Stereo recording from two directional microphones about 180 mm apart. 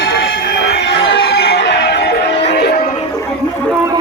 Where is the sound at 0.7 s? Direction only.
70° left (ahead or behind).